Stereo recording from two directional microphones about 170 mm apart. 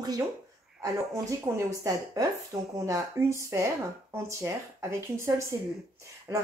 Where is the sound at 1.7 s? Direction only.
20° right (ahead or behind).